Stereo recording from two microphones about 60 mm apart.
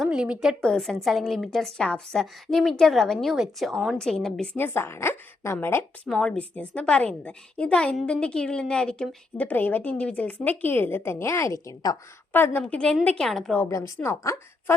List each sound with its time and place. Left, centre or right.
0.1 s a woman's voice: centre
0.6 s a woman's voice: centre
3.3 s speech: centre
3.9 s a woman's voice: centre
4.5 s a woman's voice: left
6.1 s a woman's voice: centre
9.5 s a woman's voice: left
12.3 s a woman's voice: left
12.6 s a woman's voice: centre
13.7 s a woman's voice: left